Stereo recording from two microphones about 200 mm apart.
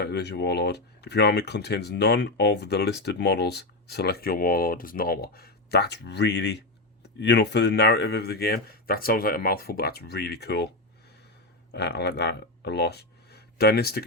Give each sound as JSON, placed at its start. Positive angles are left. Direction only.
{"t": 0.0, "sound": "speech", "side_deg": 55}
{"t": 11.7, "sound": "speech", "side_deg": 55}